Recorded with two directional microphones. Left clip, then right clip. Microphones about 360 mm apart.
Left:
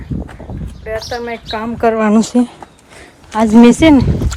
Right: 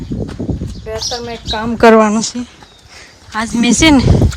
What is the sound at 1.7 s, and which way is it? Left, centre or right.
Speech, right.